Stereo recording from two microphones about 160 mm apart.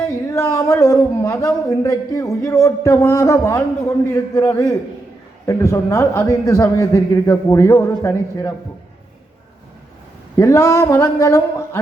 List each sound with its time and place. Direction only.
0.3 s a man's voice: 20° left (ahead or behind)
10.3 s a man's voice: 20° left (ahead or behind)